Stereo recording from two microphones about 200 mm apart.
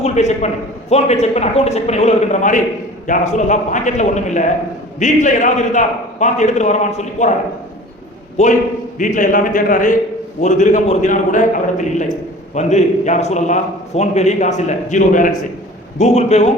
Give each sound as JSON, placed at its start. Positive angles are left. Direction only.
{"t": 0.0, "sound": "a man's voice", "side_deg": 35}
{"t": 8.4, "sound": "a man's voice", "side_deg": 35}